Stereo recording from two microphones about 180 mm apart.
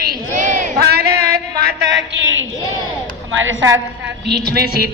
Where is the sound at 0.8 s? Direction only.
65° right (ahead or behind); by 3.7 s 90° right.